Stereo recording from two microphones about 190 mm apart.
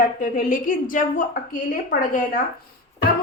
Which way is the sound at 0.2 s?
45° left (ahead or behind).